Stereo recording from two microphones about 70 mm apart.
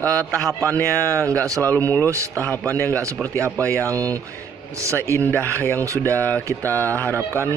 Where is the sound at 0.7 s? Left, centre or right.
Left.